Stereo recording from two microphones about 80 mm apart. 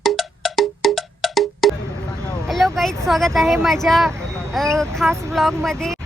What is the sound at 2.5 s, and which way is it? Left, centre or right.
Speech, centre.